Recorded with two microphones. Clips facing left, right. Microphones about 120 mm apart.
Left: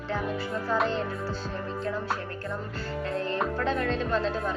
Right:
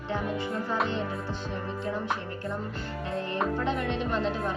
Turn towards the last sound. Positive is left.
turn(degrees=-20)  # may be behind; listen again after turning